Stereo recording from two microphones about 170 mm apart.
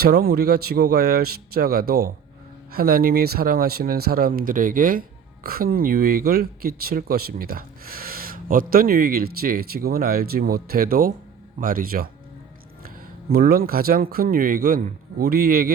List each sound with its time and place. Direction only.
0.0 s speech: 65° right (ahead or behind)
13.3 s speech: 65° right (ahead or behind)